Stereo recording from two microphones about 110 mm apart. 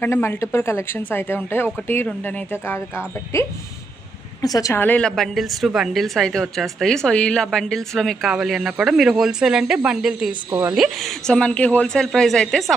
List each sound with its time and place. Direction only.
0.0 s speech: 20° left (ahead or behind)
4.7 s a woman's voice: 15° left (ahead or behind); by 10.3 s 5° right (ahead or behind)
10.5 s speech: 20° right (ahead or behind)
10.8 s a woman's voice: centre (ahead or behind)